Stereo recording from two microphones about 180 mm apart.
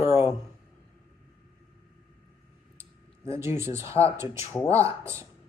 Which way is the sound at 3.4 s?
15° right (ahead or behind).